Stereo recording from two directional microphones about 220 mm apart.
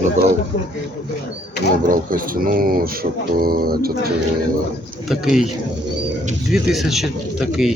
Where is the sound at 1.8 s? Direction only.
40° right (ahead or behind).